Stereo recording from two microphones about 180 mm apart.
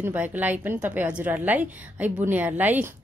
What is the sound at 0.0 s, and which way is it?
A woman's voice, 10° right (ahead or behind).